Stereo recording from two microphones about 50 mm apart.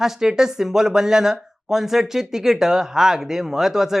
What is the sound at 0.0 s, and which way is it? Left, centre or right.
Speech, centre.